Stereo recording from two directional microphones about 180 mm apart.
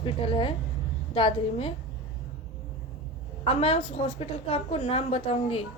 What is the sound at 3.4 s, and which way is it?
A woman's voice, 30° left (ahead or behind).